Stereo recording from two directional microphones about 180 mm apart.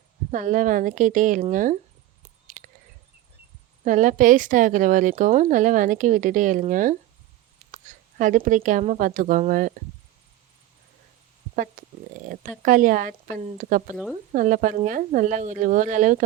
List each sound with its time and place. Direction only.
0.3 s a woman's voice: 45° right (ahead or behind)
3.8 s a woman's voice: 45° right (ahead or behind)
11.5 s a woman's voice: 45° right (ahead or behind)
13.9 s speech: centre (ahead or behind)
14.3 s a woman's voice: 45° right (ahead or behind)